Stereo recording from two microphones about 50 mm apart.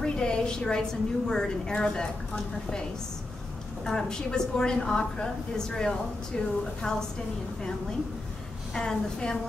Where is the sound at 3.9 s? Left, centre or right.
Centre.